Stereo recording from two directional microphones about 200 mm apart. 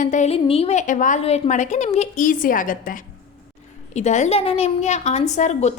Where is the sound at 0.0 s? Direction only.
35° left (ahead or behind).